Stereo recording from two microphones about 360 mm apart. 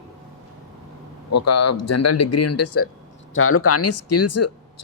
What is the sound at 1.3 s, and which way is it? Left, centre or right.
Speech, left.